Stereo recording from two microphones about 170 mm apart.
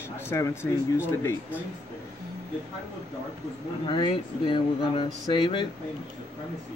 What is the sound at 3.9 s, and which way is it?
Speech, 30° left (ahead or behind).